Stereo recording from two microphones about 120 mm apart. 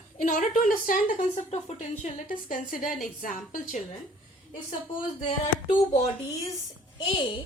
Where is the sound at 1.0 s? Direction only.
80° left.